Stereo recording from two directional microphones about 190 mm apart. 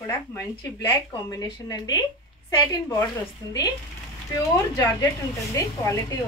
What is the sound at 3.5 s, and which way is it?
Speech, 20° left (ahead or behind).